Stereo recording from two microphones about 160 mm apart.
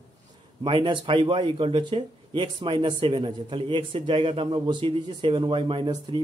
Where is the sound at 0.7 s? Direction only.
30° right (ahead or behind).